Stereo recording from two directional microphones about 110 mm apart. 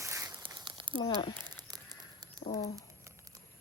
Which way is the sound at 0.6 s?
50° right (ahead or behind).